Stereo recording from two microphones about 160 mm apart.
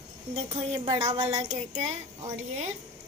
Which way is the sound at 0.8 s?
20° right (ahead or behind).